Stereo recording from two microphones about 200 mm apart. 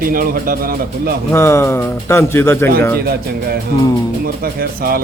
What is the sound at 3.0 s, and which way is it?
Speech, 50° right (ahead or behind).